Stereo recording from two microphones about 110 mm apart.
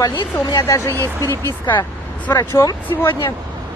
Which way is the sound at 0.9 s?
30° right (ahead or behind).